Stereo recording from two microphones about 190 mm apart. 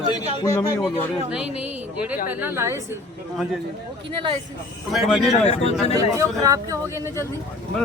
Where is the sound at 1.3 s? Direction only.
5° right (ahead or behind).